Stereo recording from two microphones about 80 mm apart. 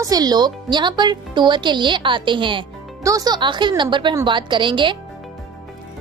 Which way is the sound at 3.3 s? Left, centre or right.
Right.